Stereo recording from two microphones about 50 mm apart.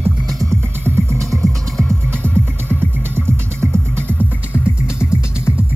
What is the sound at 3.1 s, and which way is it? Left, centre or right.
Music, right.